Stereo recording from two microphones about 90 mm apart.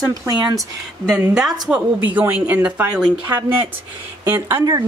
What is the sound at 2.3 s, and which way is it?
Speech, 15° right (ahead or behind).